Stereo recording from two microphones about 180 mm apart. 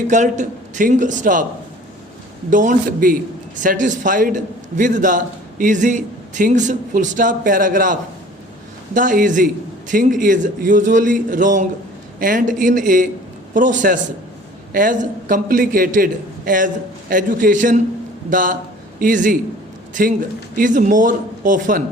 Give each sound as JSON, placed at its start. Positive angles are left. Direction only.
{"t": 0.1, "sound": "a man's voice", "side_deg": -45}
{"t": 2.5, "sound": "a man's voice", "side_deg": -45}
{"t": 9.0, "sound": "a man's voice", "side_deg": -45}
{"t": 17.1, "sound": "a man's voice", "side_deg": -50}